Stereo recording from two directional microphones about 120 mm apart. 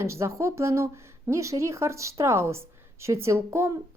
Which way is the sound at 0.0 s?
25° right (ahead or behind).